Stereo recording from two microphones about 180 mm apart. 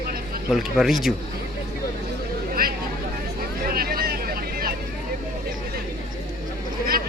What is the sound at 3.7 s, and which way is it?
Vehicle, 60° right (ahead or behind).